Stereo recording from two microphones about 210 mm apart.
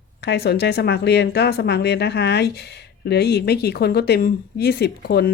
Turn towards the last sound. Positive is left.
turn(degrees=45)  # may be behind; listen again after turning